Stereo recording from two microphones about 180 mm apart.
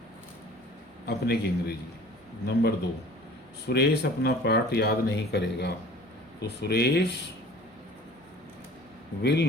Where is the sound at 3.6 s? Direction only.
65° left (ahead or behind).